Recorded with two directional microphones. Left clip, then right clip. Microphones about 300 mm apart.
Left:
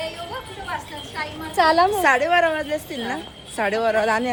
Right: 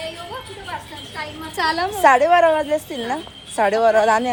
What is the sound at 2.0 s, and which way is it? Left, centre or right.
A woman's voice, centre.